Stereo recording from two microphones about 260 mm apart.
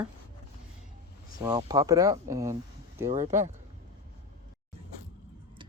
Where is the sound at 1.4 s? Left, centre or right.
Centre.